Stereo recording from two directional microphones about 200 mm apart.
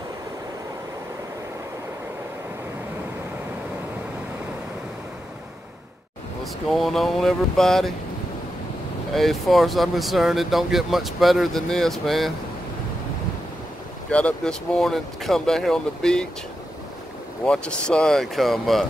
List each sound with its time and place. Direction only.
6.4 s speech: centre (ahead or behind)
9.1 s speech: centre (ahead or behind)
14.1 s speech: 5° left (ahead or behind)
17.5 s speech: 5° left (ahead or behind)